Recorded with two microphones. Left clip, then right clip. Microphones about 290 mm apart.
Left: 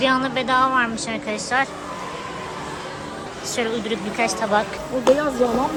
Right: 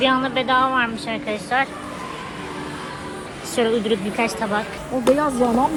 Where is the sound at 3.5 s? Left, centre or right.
Centre.